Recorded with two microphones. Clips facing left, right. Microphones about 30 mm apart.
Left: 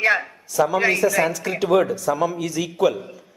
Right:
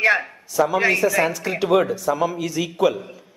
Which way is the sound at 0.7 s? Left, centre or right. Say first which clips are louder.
Even; centre.